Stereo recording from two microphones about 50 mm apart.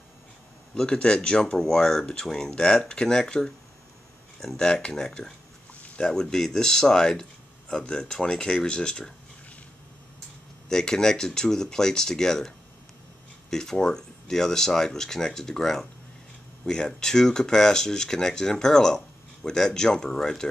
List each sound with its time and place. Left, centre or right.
0.7 s speech: centre
4.6 s speech: centre
10.7 s speech: centre